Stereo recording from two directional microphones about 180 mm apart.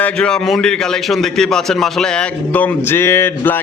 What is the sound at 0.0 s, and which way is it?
A man's voice, 5° left (ahead or behind).